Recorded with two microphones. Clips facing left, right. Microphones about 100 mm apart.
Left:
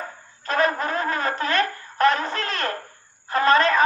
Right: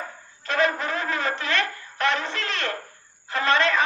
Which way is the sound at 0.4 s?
40° left (ahead or behind).